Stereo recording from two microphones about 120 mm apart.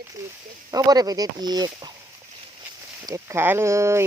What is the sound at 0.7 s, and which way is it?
Speech, 30° right (ahead or behind).